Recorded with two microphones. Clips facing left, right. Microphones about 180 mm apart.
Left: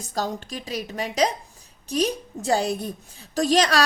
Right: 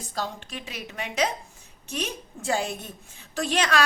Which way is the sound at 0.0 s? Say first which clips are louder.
Left 4 dB; 40° left (ahead or behind).